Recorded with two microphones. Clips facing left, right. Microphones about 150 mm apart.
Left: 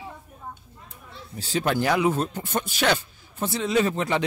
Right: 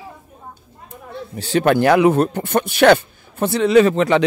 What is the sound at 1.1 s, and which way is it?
Speech, 65° right (ahead or behind).